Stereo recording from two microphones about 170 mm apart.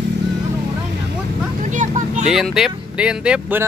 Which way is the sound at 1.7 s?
45° right (ahead or behind).